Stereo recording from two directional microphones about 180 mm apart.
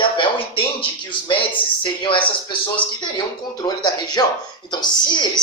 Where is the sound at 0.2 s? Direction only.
30° left (ahead or behind).